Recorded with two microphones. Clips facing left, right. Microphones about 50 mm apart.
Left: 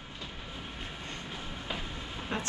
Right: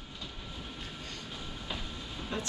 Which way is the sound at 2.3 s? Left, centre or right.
Left.